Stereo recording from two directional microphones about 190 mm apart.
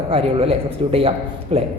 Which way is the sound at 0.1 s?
30° right (ahead or behind).